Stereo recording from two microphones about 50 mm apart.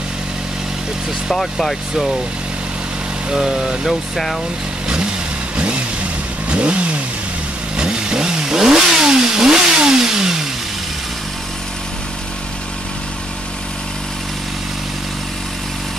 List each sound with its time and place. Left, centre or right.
1.3 s speech: centre
3.3 s speech: centre
6.5 s vehicle: right